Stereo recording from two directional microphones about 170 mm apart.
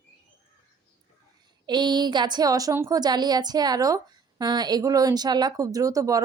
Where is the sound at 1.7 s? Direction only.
25° right (ahead or behind).